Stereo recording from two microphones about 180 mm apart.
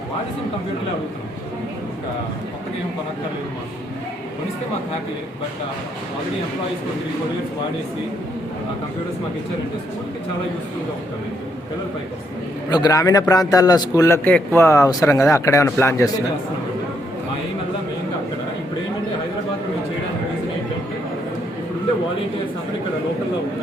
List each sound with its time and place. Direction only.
12.7 s a man's voice: 20° left (ahead or behind)